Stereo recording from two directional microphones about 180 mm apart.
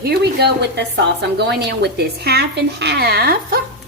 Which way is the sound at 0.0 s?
65° right (ahead or behind).